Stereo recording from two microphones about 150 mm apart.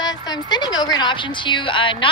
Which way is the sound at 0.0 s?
25° left (ahead or behind).